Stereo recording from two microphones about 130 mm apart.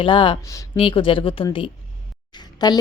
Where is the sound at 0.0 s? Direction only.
40° left (ahead or behind).